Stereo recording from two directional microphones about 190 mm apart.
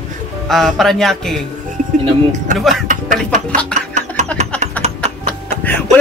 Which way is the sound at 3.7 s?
40° right (ahead or behind).